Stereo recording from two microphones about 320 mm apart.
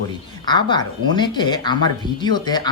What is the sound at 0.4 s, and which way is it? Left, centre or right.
Speech, centre.